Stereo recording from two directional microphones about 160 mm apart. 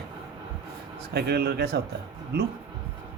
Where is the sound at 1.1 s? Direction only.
90° right.